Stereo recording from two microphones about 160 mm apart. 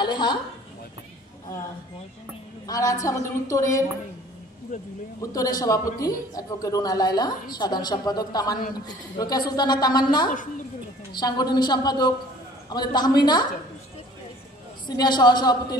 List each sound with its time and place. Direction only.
0.0 s a woman's voice: 30° left (ahead or behind)
2.6 s a woman's voice: 20° left (ahead or behind)
5.2 s a woman's voice: 20° left (ahead or behind)
14.9 s a woman's voice: 25° left (ahead or behind)